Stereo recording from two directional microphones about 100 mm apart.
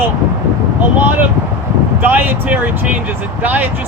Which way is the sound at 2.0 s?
20° right (ahead or behind).